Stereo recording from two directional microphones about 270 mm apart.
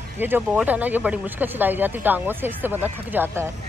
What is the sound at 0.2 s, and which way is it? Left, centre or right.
Speech, centre.